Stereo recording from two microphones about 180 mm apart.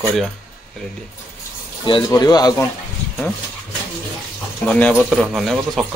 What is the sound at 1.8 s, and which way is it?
Speech, 25° left (ahead or behind).